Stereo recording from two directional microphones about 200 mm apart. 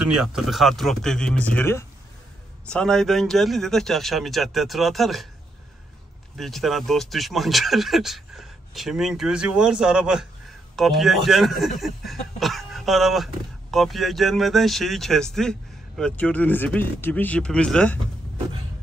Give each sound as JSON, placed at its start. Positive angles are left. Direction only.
{"t": 0.1, "sound": "speech", "side_deg": 0}
{"t": 6.3, "sound": "speech", "side_deg": 0}